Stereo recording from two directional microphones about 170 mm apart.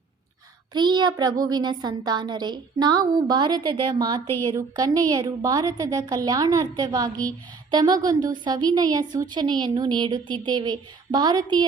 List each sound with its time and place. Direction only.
0.7 s a woman's voice: 25° right (ahead or behind)